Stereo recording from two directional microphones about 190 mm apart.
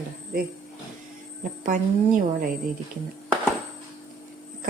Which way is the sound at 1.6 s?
45° right (ahead or behind).